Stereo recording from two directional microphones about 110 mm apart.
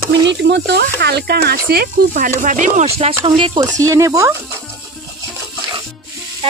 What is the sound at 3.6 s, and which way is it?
Speech, 30° right (ahead or behind).